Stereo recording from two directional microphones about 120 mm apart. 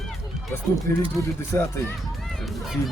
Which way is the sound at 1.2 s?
25° left (ahead or behind).